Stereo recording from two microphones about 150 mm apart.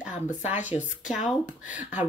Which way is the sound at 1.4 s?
55° left (ahead or behind).